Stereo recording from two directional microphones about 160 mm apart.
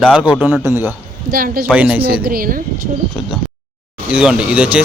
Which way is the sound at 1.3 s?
65° right (ahead or behind).